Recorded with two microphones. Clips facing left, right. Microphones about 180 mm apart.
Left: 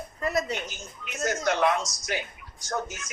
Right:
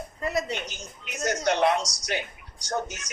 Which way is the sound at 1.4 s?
30° right (ahead or behind).